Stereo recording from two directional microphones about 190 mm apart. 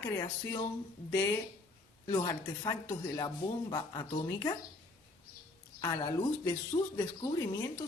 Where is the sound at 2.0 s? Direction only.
20° left (ahead or behind).